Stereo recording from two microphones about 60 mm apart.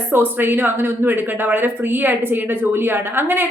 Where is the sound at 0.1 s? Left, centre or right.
Right.